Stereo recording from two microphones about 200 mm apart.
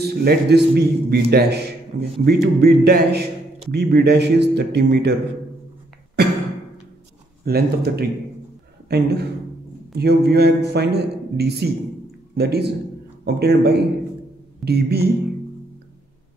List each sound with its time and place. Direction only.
0.0 s a man's voice: 50° right (ahead or behind)
7.4 s a man's voice: 50° right (ahead or behind)